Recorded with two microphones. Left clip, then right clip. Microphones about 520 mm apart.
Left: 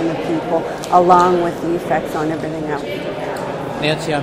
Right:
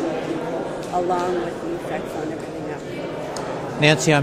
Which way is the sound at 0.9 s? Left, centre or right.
Left.